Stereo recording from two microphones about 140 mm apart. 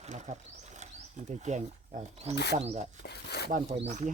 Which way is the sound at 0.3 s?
65° right (ahead or behind).